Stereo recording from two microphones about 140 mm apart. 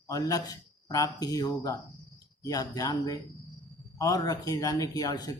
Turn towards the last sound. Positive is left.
turn(degrees=25)  # may be behind; listen again after turning